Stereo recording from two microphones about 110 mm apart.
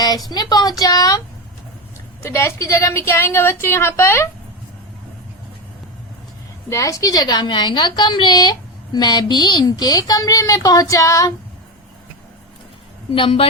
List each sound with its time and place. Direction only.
0.5 s a woman's voice: 40° left (ahead or behind)
2.2 s a woman's voice: 25° left (ahead or behind)
6.7 s a woman's voice: 30° left (ahead or behind)
13.1 s a woman's voice: 55° left (ahead or behind)